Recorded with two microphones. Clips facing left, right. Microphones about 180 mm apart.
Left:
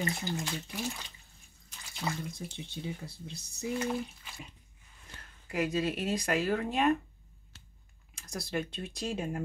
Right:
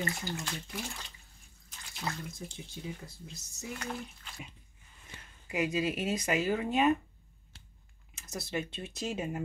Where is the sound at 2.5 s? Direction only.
30° left (ahead or behind).